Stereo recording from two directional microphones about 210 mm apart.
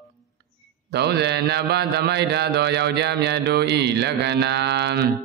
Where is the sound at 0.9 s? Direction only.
50° right (ahead or behind).